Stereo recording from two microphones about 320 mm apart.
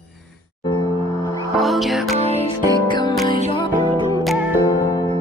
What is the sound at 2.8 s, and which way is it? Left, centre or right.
Music, centre.